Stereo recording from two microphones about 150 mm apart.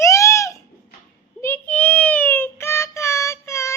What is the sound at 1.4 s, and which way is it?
Child singing, 15° left (ahead or behind).